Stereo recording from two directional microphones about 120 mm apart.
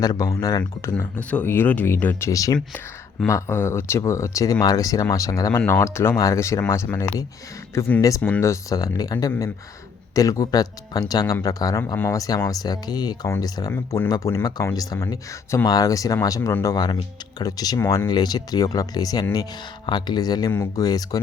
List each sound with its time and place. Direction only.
0.0 s speech: 30° left (ahead or behind)
0.8 s speech: 15° left (ahead or behind)
2.3 s speech: 30° left (ahead or behind)
5.5 s speech: 20° left (ahead or behind)
8.4 s speech: 25° left (ahead or behind)
10.2 s speech: 30° left (ahead or behind)
13.7 s speech: 20° left (ahead or behind)
16.7 s speech: 35° left (ahead or behind)